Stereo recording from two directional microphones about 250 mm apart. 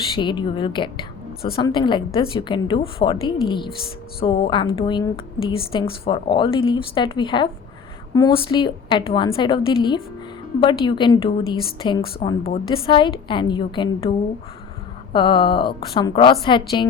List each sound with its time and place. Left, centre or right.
0.2 s a woman's voice: centre
15.1 s a woman's voice: centre